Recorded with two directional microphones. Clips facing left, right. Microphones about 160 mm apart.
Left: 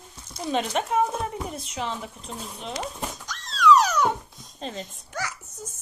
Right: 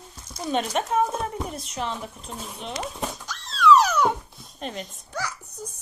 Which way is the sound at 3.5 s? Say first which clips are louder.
Right 1 dB; 15° left (ahead or behind).